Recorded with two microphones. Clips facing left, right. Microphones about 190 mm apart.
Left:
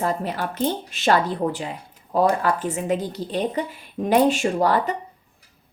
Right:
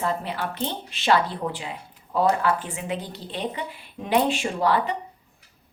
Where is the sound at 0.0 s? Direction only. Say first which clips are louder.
Left 3 dB; 45° left (ahead or behind).